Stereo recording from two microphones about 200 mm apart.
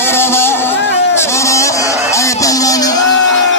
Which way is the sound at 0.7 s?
60° left (ahead or behind).